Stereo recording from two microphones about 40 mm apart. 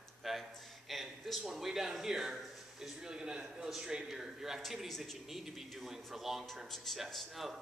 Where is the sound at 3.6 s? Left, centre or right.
Centre.